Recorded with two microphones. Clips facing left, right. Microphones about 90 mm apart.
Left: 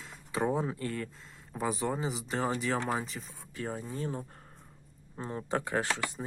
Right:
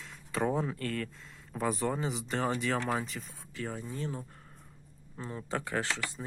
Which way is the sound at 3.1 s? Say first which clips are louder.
Even; 30° left (ahead or behind).